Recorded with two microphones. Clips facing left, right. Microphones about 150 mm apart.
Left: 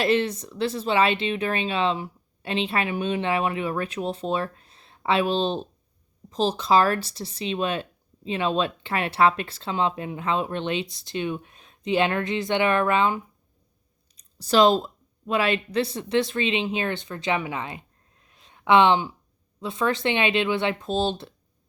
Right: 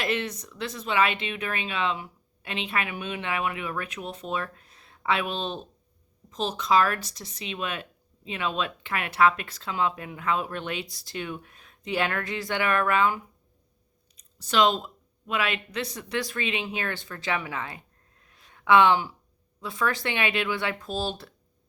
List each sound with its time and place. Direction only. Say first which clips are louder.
0.0 s speech: left 7 dB; 30° left (ahead or behind)
14.2 s speech: left 5 dB; 35° left (ahead or behind); by 17.8 s 20° left (ahead or behind)
18.3 s a sound: left 1 dB; 20° left (ahead or behind)
19.5 s speech: left 3 dB; 25° left (ahead or behind)